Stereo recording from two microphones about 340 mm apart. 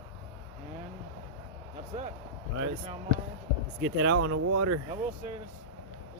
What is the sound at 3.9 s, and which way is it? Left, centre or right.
Speech, right.